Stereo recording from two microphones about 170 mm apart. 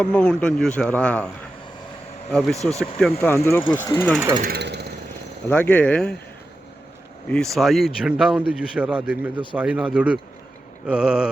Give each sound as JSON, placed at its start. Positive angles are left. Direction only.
{"t": 0.0, "sound": "speech", "side_deg": 5}
{"t": 2.3, "sound": "speech", "side_deg": 0}
{"t": 3.2, "sound": "speech", "side_deg": 15}
{"t": 4.4, "sound": "speech", "side_deg": -65}
{"t": 5.5, "sound": "speech", "side_deg": 10}
{"t": 7.3, "sound": "speech", "side_deg": 5}